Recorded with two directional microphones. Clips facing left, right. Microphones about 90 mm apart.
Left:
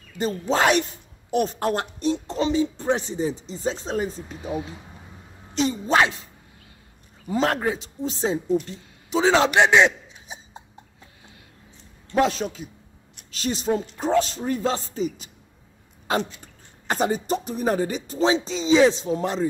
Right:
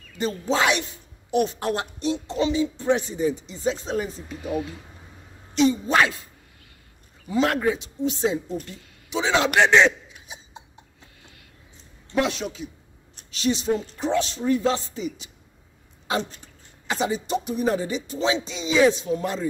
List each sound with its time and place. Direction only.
0.2 s a woman's voice: 45° left (ahead or behind)
7.2 s a woman's voice: 40° left (ahead or behind)
9.7 s a man's voice: 15° left (ahead or behind)
10.0 s cough: 35° left (ahead or behind)
12.1 s a woman's voice: 40° left (ahead or behind)
16.8 s a woman's voice: 45° left (ahead or behind); by 19.4 s 30° left (ahead or behind)